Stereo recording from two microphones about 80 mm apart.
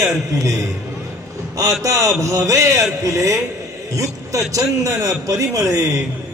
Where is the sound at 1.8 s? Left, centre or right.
Right.